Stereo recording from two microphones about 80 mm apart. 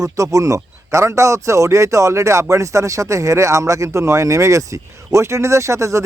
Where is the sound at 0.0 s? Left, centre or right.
Right.